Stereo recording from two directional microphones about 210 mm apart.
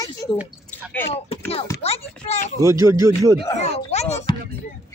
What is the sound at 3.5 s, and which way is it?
Speech, 30° left (ahead or behind).